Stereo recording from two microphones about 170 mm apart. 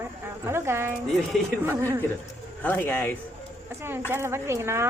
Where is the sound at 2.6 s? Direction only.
10° left (ahead or behind).